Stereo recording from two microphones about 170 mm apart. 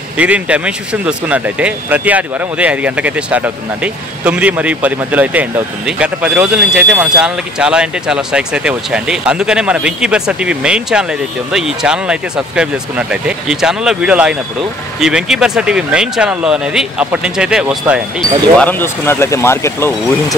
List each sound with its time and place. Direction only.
0.2 s speech: 5° right (ahead or behind)
18.6 s speech: 10° left (ahead or behind)